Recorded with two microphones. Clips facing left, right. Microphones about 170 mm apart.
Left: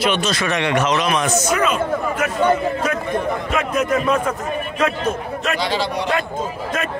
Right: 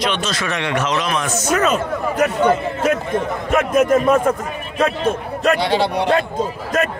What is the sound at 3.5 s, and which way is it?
Speech, 45° right (ahead or behind).